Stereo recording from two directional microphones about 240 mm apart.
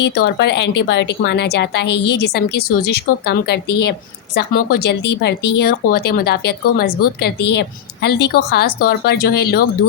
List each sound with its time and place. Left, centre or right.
0.2 s a woman's voice: left